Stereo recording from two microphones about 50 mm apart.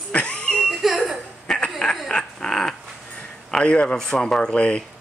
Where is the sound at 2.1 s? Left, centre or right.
Centre.